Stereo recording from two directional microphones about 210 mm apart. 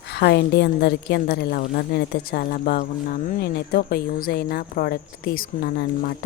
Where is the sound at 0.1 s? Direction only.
50° left (ahead or behind).